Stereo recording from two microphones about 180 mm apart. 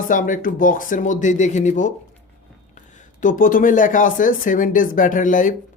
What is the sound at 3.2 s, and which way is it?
Speech, 50° left (ahead or behind).